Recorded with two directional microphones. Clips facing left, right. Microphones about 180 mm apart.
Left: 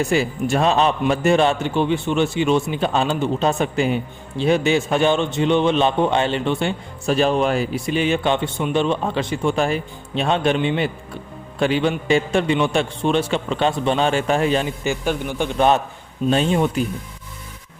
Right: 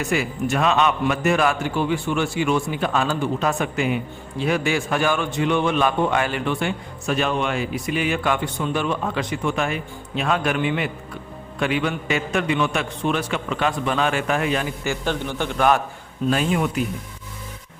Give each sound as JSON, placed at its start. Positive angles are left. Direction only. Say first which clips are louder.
{"t": 0.0, "sound": "a man's voice", "louder": "left 3 dB", "side_deg": 30}
{"t": 14.8, "sound": "a man's voice", "louder": "left 2 dB", "side_deg": 10}